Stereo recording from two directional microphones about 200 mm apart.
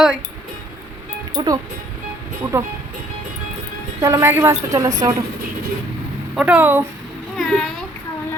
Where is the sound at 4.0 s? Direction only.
15° right (ahead or behind).